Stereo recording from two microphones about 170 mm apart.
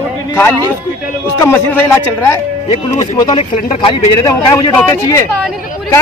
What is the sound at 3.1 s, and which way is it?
Speech, 25° left (ahead or behind).